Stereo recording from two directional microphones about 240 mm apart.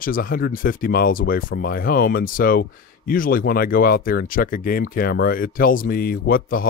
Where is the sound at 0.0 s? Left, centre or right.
Left.